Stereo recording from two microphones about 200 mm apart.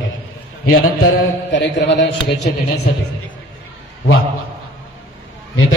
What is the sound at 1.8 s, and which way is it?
Speech, 60° left (ahead or behind).